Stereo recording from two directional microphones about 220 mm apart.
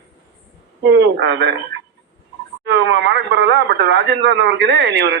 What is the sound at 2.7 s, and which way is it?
Speech, 55° right (ahead or behind).